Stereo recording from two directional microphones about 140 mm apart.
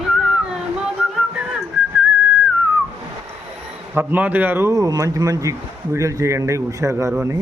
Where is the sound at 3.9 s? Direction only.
15° right (ahead or behind).